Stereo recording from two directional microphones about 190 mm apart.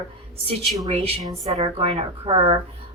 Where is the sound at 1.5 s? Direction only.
30° right (ahead or behind).